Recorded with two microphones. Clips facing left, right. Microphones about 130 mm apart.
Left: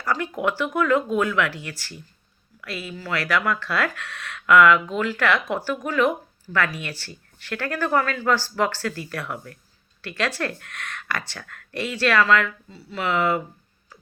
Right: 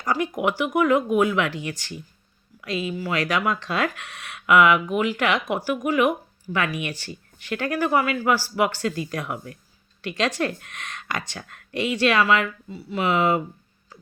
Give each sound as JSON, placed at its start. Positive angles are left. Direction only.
{"t": 0.0, "sound": "speech", "side_deg": -15}